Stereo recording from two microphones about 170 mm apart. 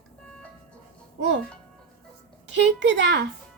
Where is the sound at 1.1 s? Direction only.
90° right.